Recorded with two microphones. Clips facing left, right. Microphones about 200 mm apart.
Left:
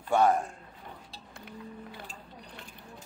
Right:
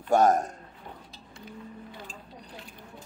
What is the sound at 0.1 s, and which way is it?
Speech, 40° right (ahead or behind).